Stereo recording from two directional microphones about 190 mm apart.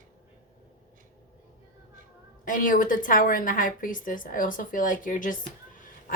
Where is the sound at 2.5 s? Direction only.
45° left (ahead or behind).